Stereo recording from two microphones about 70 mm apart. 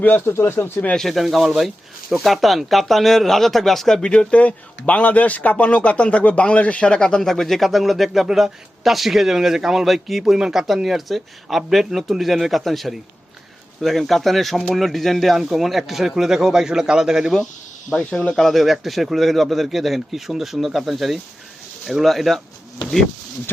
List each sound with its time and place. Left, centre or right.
0.0 s speech: left
0.9 s speech: centre
17.9 s speech: centre